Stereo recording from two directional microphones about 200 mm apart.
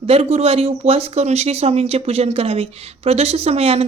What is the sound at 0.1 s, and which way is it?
Speech, 30° right (ahead or behind).